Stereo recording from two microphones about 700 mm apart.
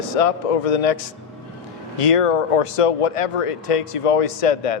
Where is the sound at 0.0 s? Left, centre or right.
Left.